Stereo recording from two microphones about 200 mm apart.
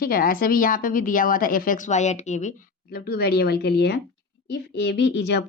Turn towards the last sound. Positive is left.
turn(degrees=60)  # may be behind; listen again after turning